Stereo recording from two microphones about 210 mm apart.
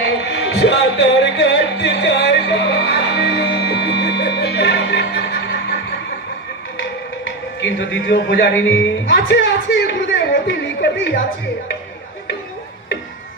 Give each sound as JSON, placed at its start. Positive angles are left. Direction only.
{"t": 0.0, "sound": "music", "side_deg": 55}
{"t": 7.6, "sound": "a man's voice", "side_deg": 55}
{"t": 8.7, "sound": "music", "side_deg": 55}